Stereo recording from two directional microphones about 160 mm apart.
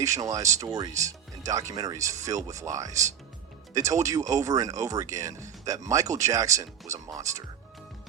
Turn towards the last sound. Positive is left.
turn(degrees=-20)  # may be behind; listen again after turning